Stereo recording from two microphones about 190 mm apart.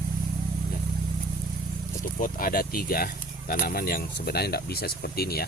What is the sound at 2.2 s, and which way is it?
Speech, 50° left (ahead or behind).